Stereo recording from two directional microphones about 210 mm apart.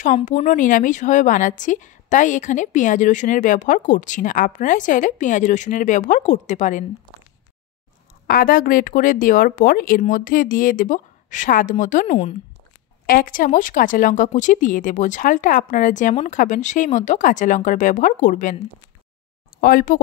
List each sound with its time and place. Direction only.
0.0 s speech: 35° left (ahead or behind)
8.3 s speech: 45° left (ahead or behind)
13.0 s speech: 45° left (ahead or behind)
19.6 s speech: 45° left (ahead or behind)